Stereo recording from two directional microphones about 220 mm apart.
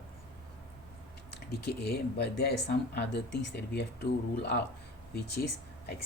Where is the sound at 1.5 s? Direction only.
45° left (ahead or behind).